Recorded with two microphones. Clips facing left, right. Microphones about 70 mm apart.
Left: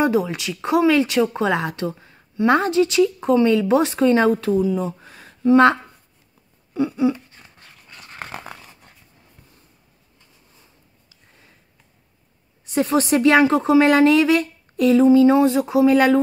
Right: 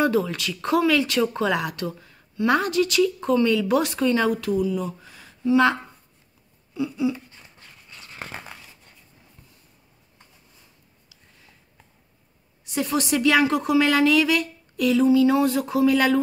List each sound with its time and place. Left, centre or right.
0.0 s speech: centre; by 5.8 s left
6.7 s a sound: left
12.7 s speech: left